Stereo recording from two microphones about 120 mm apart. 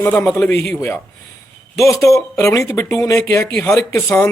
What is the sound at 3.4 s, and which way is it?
Speech, 10° left (ahead or behind).